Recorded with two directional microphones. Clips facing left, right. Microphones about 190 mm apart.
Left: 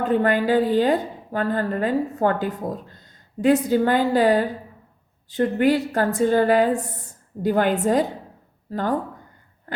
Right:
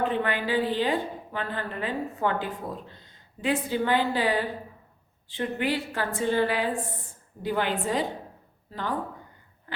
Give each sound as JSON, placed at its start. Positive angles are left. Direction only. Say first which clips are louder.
{"t": 0.0, "sound": "a woman's voice", "louder": "left 7 dB", "side_deg": 45}
{"t": 9.7, "sound": "wheeze", "louder": "left 6 dB", "side_deg": 45}